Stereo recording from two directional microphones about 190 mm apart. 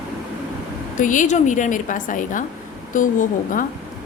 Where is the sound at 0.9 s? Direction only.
40° left (ahead or behind).